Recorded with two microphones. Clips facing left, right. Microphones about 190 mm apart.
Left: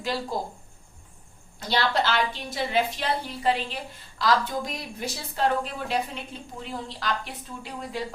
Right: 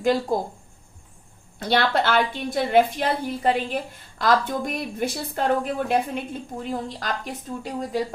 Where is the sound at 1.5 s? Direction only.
60° right (ahead or behind).